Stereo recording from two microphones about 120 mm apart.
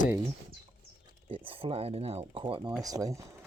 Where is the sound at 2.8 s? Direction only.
30° right (ahead or behind).